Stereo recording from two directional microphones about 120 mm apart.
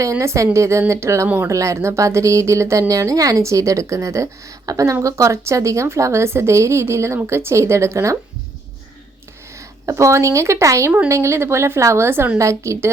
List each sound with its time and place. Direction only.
0.0 s speech: 25° right (ahead or behind)
9.8 s speech: 25° right (ahead or behind)